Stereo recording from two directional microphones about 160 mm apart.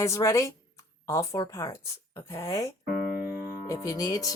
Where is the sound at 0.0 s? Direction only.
20° left (ahead or behind).